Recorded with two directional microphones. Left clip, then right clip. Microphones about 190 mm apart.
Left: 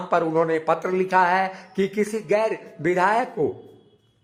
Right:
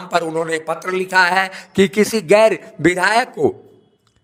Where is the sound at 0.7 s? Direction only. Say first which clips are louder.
Left 1 dB; centre (ahead or behind).